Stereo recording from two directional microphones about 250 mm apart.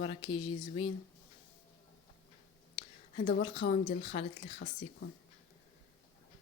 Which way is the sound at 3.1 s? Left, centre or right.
Left.